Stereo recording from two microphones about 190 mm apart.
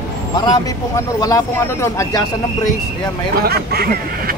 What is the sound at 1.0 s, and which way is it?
Speech, 20° left (ahead or behind).